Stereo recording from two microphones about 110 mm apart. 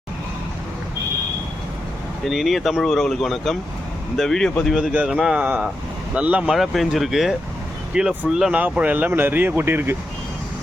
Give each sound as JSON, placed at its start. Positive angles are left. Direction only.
{"t": 2.2, "sound": "speech", "side_deg": 0}
{"t": 4.7, "sound": "speech", "side_deg": -5}
{"t": 6.6, "sound": "speech", "side_deg": 0}